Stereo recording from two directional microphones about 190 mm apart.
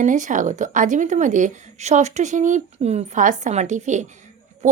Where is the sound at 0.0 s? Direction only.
40° right (ahead or behind).